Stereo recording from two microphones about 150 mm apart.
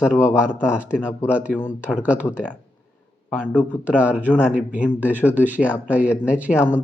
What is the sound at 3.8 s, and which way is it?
Speech, 10° right (ahead or behind).